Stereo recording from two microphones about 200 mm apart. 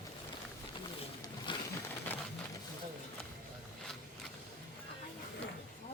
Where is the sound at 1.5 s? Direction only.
25° left (ahead or behind).